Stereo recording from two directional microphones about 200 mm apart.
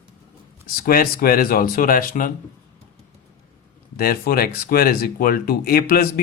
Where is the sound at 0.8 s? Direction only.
45° left (ahead or behind).